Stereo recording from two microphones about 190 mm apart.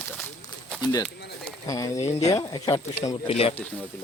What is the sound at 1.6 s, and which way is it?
Speech, 15° left (ahead or behind).